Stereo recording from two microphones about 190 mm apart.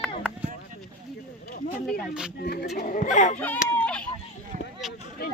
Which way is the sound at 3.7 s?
5° left (ahead or behind).